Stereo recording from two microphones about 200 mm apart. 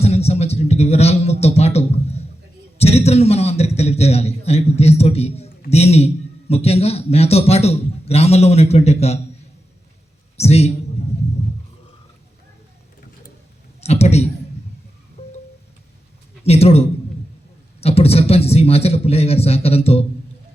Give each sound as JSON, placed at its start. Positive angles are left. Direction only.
{"t": 0.0, "sound": "a sound", "side_deg": 30}
{"t": 6.5, "sound": "a man's voice", "side_deg": 30}
{"t": 10.3, "sound": "a man's voice", "side_deg": 30}
{"t": 13.8, "sound": "a sound", "side_deg": 30}
{"t": 15.2, "sound": "music", "side_deg": 30}
{"t": 16.4, "sound": "a man's voice", "side_deg": 30}